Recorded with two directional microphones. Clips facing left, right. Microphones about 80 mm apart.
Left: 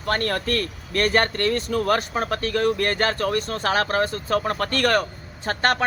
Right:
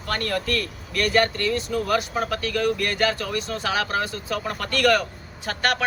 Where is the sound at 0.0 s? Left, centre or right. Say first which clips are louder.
Left 2 dB; left.